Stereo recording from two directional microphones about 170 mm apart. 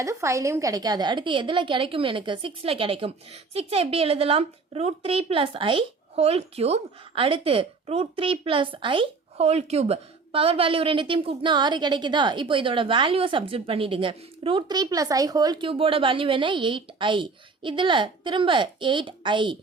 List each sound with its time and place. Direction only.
0.0 s a woman's voice: 15° right (ahead or behind)